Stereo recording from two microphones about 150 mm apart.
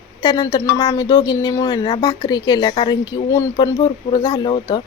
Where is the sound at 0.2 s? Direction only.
25° left (ahead or behind).